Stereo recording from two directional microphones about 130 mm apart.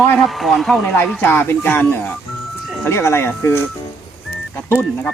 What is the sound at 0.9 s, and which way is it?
Speech, 15° left (ahead or behind).